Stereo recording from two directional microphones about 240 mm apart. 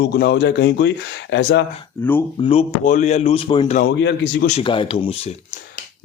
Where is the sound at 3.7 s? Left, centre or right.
Left.